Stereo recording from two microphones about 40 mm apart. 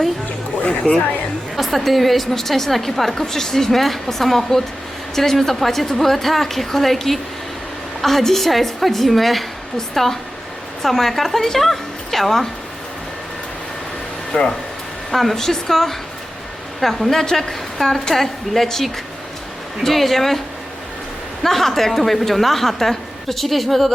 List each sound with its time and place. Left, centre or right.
1.5 s a woman's voice: centre
14.3 s speech: left
15.1 s a woman's voice: centre
21.4 s a woman's voice: centre